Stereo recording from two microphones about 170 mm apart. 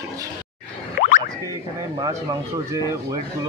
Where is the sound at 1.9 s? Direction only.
25° right (ahead or behind).